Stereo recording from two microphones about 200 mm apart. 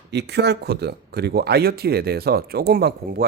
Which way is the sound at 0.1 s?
55° right (ahead or behind).